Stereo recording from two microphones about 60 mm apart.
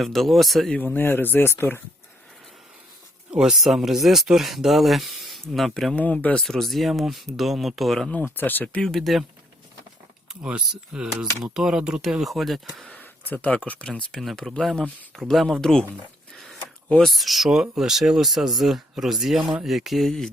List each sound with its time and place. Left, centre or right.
0.0 s speech: centre
0.9 s speech: left
3.3 s speech: centre
6.0 s speech: left
6.4 s speech: centre
8.4 s speech: left
8.8 s speech: centre
10.4 s speech: centre
12.2 s speech: centre
12.9 s speech: left; by 15.9 s centre
16.3 s a sound: centre
17.0 s speech: centre